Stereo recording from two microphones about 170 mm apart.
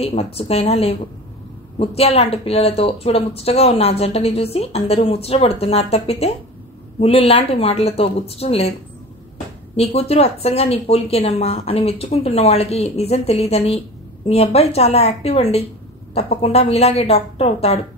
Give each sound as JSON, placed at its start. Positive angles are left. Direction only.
{"t": 0.0, "sound": "speech", "side_deg": 35}
{"t": 9.8, "sound": "speech", "side_deg": 35}